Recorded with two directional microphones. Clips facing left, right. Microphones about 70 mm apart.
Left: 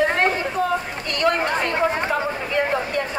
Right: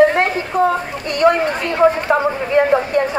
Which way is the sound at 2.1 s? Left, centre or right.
Right.